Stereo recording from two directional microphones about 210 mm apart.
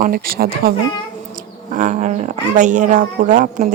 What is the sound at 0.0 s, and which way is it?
Speech, 45° right (ahead or behind).